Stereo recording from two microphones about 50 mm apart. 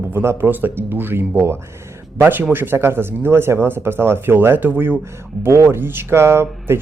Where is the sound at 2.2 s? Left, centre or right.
Right.